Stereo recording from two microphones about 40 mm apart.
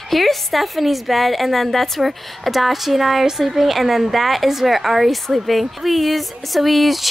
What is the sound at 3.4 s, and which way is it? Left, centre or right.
Speech, centre.